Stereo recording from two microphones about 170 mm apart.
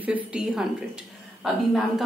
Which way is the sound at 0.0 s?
5° right (ahead or behind).